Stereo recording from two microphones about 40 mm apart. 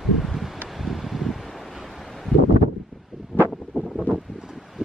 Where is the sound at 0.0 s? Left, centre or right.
Centre.